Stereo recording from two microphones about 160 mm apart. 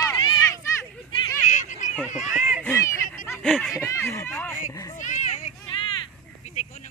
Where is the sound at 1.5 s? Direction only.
50° left (ahead or behind).